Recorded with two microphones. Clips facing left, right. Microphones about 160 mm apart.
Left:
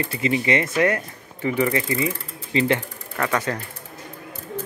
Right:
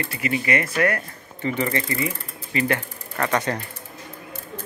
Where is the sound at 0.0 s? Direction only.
25° left (ahead or behind).